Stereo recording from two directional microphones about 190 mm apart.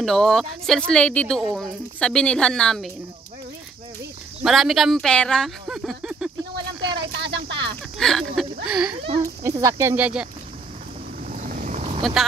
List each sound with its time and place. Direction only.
0.0 s speech: centre (ahead or behind)
4.4 s speech: centre (ahead or behind)
7.2 s a sound: 65° right (ahead or behind)
8.0 s speech: centre (ahead or behind)
9.2 s speech: 15° right (ahead or behind)
11.2 s vehicle: 45° right (ahead or behind)
12.0 s speech: centre (ahead or behind)